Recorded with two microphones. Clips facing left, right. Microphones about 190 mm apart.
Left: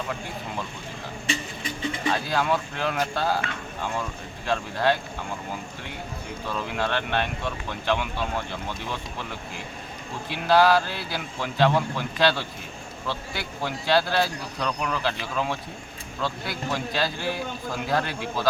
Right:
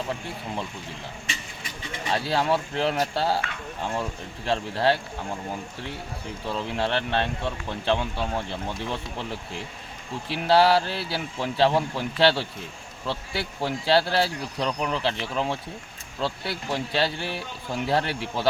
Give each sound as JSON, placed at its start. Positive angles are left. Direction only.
{"t": 2.1, "sound": "speech", "side_deg": -30}
{"t": 4.4, "sound": "speech", "side_deg": -25}
{"t": 6.5, "sound": "speech", "side_deg": -25}
{"t": 10.2, "sound": "speech", "side_deg": -30}